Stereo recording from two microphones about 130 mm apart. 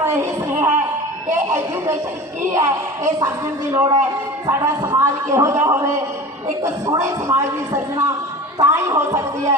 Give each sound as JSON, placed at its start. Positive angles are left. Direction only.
{"t": 0.0, "sound": "a sound", "side_deg": -20}
{"t": 1.3, "sound": "speech", "side_deg": -20}
{"t": 7.0, "sound": "speech", "side_deg": -25}